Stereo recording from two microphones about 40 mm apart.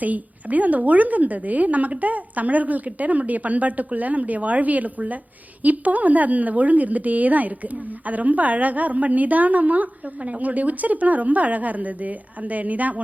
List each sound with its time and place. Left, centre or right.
0.0 s a woman's voice: right